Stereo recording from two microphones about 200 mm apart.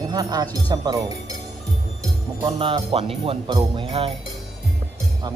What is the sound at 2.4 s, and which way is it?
Speech, 25° right (ahead or behind).